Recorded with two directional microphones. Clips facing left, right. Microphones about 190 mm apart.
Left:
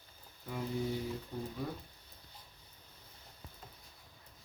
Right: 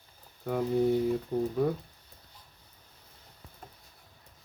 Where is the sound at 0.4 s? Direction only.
65° right (ahead or behind).